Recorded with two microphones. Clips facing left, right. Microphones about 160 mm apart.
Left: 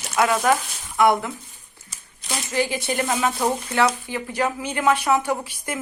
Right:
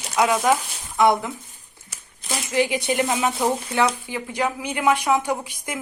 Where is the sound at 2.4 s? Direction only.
20° right (ahead or behind).